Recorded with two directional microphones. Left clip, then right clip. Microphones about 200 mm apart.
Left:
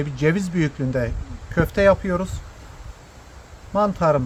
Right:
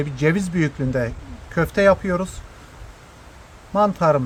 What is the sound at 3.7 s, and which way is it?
Speech, 5° right (ahead or behind).